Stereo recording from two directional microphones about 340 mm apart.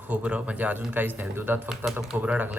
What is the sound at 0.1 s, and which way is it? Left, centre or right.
Speech, centre.